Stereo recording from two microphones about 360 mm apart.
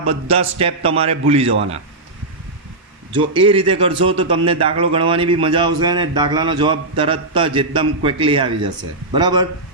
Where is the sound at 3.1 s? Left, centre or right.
Centre.